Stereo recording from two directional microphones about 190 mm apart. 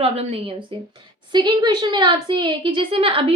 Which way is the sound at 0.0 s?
30° right (ahead or behind).